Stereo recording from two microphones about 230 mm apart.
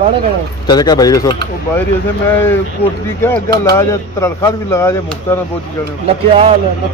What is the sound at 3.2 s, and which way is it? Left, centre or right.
Speech, centre.